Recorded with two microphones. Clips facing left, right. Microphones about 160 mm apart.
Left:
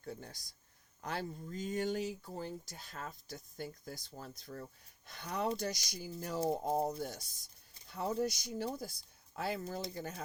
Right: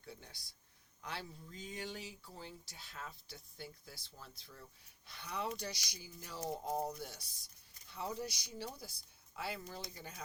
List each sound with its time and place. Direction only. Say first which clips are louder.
0.0 s speech: left 8 dB; 45° left (ahead or behind)
6.4 s speech: left 7 dB; 30° left (ahead or behind)
7.0 s speech: left 7 dB; 45° left (ahead or behind)